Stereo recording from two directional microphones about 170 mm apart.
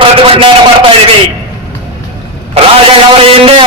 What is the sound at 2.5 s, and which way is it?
A man's voice, 35° right (ahead or behind).